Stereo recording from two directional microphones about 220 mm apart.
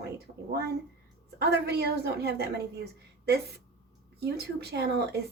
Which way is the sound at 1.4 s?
45° right (ahead or behind).